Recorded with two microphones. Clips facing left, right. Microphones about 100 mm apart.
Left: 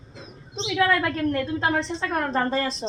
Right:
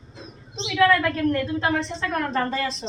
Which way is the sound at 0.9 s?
25° left (ahead or behind).